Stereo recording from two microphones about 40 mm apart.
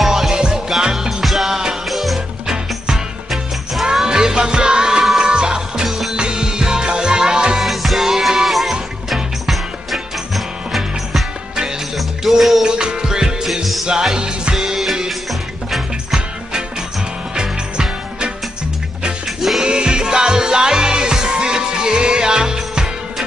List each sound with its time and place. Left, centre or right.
0.0 s music: centre
0.3 s music: right
0.9 s music: centre
2.4 s music: centre
5.9 s music: centre
6.1 s music: right
7.5 s music: centre
12.0 s music: centre
12.6 s music: centre
13.5 s music: centre
14.1 s music: centre
17.4 s music: right
19.2 s music: centre
19.6 s music: right